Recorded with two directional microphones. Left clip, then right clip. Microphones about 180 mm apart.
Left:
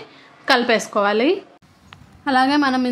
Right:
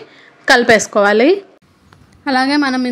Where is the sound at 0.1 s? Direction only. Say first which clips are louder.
Right 6 dB; 25° right (ahead or behind).